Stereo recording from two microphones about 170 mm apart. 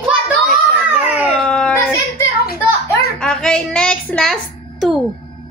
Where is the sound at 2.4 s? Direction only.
65° left (ahead or behind).